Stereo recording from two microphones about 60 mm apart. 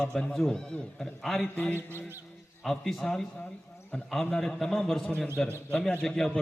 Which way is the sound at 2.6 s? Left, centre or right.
Centre.